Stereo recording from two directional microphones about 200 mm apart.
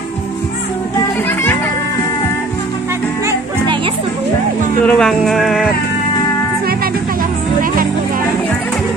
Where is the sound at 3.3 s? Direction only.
20° right (ahead or behind).